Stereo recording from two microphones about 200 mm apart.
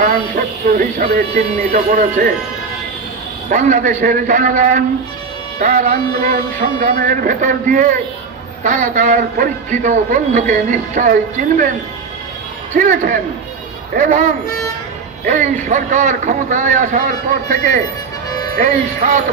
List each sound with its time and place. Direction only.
0.4 s speech: 45° right (ahead or behind)
3.4 s speech: 40° right (ahead or behind)
12.7 s speech: 40° right (ahead or behind)
15.2 s speech: 40° right (ahead or behind)
18.6 s speech: 40° right (ahead or behind)